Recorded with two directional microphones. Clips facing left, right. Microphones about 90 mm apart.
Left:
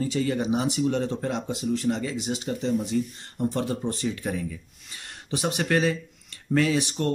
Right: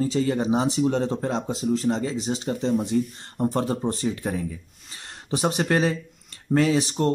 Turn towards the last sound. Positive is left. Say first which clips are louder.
# right 3 dB
turn(degrees=-30)  # may be behind; listen again after turning